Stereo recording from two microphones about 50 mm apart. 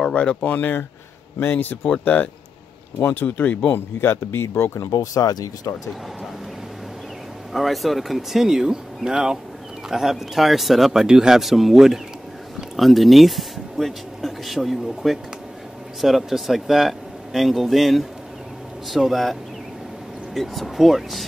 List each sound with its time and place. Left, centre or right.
0.4 s speech: left
1.9 s speech: left
3.0 s speech: left
3.7 s a man's voice: left
7.5 s speech: centre
20.3 s speech: centre